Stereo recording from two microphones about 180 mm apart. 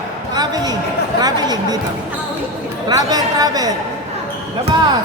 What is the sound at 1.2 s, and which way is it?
Speech, 20° right (ahead or behind).